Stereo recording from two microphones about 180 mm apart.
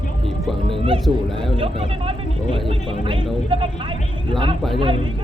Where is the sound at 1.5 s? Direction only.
30° right (ahead or behind).